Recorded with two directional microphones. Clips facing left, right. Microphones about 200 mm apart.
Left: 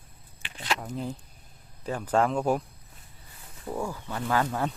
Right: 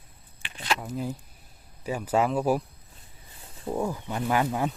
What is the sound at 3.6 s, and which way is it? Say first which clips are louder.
Speech: right 4 dB; 20° right (ahead or behind).